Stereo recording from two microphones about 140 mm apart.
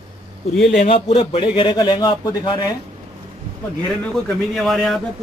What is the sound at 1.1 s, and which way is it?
Speech, 45° left (ahead or behind).